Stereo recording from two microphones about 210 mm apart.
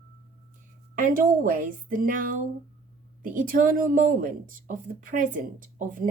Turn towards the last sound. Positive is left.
turn(degrees=-40)  # may be behind; listen again after turning